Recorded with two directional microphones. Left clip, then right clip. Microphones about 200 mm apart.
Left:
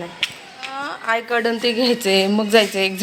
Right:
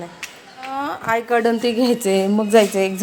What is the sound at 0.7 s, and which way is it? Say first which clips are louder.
A woman's voice: right 1 dB; 20° right (ahead or behind).